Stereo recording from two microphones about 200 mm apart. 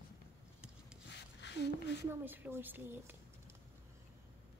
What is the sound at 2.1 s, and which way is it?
A woman's voice, 10° right (ahead or behind).